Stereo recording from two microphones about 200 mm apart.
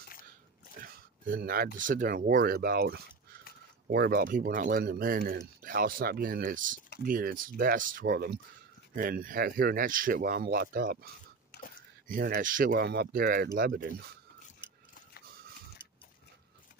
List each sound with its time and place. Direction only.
0.7 s speech: 45° right (ahead or behind)
12.1 s speech: 45° right (ahead or behind)